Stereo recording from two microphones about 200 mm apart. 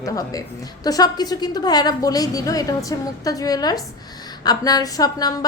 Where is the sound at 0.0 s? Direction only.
15° left (ahead or behind).